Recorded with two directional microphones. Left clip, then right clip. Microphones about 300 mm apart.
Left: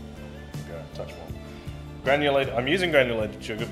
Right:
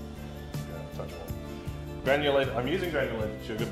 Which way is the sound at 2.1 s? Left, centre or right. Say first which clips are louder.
Left 3 dB; left.